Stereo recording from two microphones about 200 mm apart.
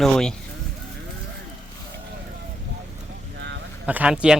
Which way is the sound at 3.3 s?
60° right (ahead or behind).